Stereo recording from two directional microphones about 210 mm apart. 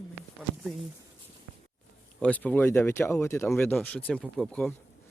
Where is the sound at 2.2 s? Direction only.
5° left (ahead or behind).